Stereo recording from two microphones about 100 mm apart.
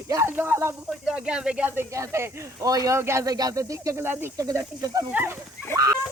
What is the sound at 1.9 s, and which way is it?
Speech, 30° right (ahead or behind).